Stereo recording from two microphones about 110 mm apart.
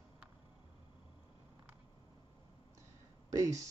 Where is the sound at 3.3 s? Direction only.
30° right (ahead or behind).